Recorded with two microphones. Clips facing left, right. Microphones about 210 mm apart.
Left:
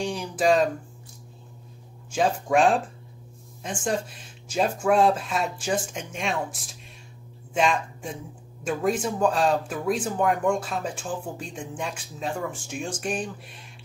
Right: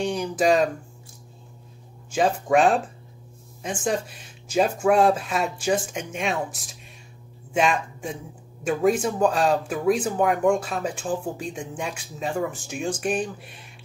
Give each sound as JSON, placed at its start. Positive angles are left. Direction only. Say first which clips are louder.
{"t": 0.0, "sound": "a sound", "louder": "right 2 dB", "side_deg": -5}
{"t": 2.0, "sound": "speech", "louder": "right 2 dB", "side_deg": -5}
{"t": 3.8, "sound": "speech", "louder": "right 1 dB", "side_deg": -5}
{"t": 7.5, "sound": "speech", "louder": "right 1 dB", "side_deg": -5}